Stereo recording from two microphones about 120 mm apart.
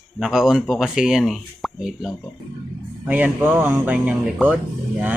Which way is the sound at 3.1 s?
15° right (ahead or behind).